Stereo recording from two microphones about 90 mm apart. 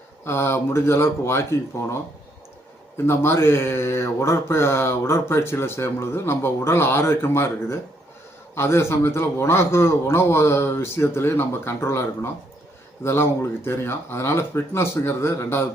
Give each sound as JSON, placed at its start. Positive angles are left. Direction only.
{"t": 0.3, "sound": "speech", "side_deg": 25}
{"t": 3.1, "sound": "speech", "side_deg": 25}